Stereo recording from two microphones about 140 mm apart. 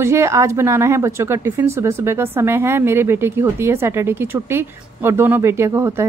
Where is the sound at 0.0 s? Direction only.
20° right (ahead or behind).